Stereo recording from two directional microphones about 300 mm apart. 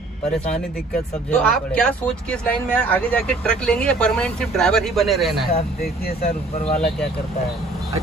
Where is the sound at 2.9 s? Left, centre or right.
Centre.